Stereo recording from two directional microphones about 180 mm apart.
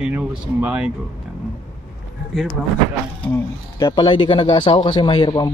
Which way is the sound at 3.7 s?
25° left (ahead or behind).